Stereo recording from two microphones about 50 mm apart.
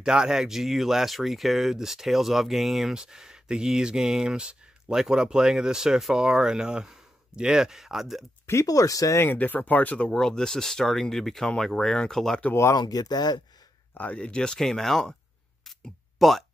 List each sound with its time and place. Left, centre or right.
0.0 s speech: centre
8.5 s speech: left
9.3 s speech: left
10.1 s speech: centre
14.1 s speech: centre
15.8 s a sound: centre